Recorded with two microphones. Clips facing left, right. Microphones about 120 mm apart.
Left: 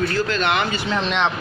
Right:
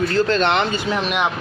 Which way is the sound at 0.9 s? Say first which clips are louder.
Left 2 dB; 10° right (ahead or behind).